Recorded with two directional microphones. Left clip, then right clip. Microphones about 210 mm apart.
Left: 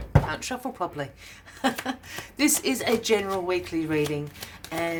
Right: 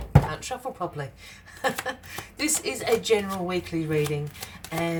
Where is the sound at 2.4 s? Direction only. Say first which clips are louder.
Left 4 dB; 35° left (ahead or behind).